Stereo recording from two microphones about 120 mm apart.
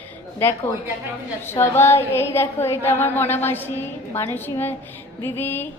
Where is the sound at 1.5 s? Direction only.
20° left (ahead or behind).